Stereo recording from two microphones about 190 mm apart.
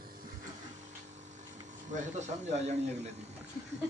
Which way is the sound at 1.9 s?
40° right (ahead or behind).